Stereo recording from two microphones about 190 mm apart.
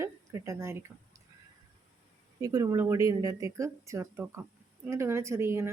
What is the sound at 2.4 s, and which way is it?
Speech, 20° right (ahead or behind).